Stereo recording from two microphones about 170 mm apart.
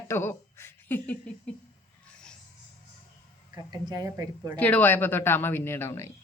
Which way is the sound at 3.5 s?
25° right (ahead or behind).